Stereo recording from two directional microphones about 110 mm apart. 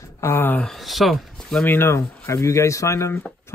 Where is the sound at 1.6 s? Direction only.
20° left (ahead or behind).